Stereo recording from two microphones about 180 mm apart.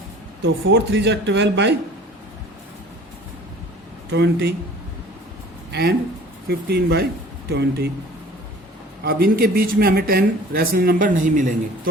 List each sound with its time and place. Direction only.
0.4 s speech: 80° right
4.1 s speech: 65° right (ahead or behind)
5.7 s speech: 60° right (ahead or behind)
9.0 s speech: 55° right (ahead or behind)